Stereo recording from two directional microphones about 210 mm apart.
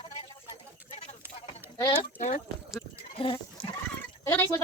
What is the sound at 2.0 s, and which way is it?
Speech, 35° left (ahead or behind).